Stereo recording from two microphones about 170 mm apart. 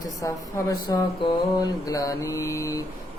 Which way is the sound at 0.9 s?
25° left (ahead or behind).